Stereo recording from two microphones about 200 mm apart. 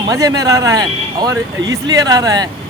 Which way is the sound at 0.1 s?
15° right (ahead or behind).